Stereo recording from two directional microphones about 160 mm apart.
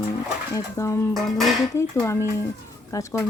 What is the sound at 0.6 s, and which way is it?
Speech, 20° left (ahead or behind).